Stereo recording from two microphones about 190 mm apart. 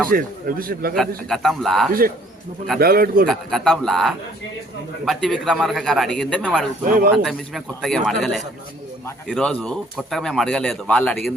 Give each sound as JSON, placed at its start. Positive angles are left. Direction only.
{"t": 0.1, "sound": "a man's voice", "side_deg": -50}
{"t": 0.9, "sound": "speech", "side_deg": 0}
{"t": 1.9, "sound": "a man's voice", "side_deg": -50}
{"t": 3.2, "sound": "speech", "side_deg": 0}
{"t": 6.8, "sound": "a man's voice", "side_deg": -45}
{"t": 7.2, "sound": "speech", "side_deg": 0}